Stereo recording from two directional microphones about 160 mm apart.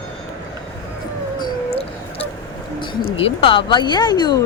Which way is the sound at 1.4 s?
30° left (ahead or behind).